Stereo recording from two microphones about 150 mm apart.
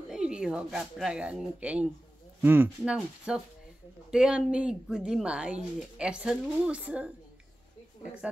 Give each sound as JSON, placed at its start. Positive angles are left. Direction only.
{"t": 0.1, "sound": "speech", "side_deg": -5}